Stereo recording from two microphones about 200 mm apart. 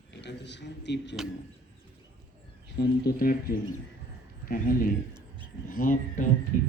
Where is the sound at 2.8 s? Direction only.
50° left (ahead or behind).